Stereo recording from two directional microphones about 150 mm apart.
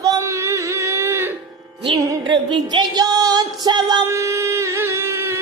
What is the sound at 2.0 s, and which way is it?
Music, 30° right (ahead or behind).